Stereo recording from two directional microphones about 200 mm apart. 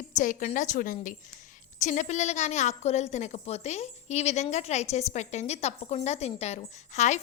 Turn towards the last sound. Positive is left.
turn(degrees=35)  # may be behind; listen again after turning